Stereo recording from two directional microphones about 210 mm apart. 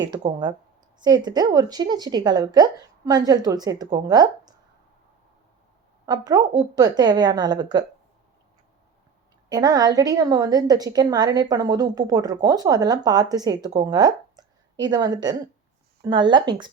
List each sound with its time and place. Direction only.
0.1 s a woman's voice: 20° right (ahead or behind)
6.1 s a woman's voice: 20° right (ahead or behind)
9.5 s a woman's voice: 20° right (ahead or behind)